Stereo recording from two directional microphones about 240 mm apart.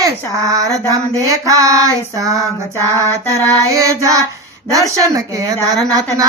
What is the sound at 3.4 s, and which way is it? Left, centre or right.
Child singing, centre.